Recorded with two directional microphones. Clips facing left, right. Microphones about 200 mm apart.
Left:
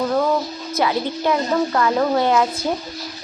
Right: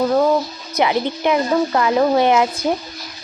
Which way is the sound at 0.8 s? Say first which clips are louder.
Right 3 dB; 20° right (ahead or behind).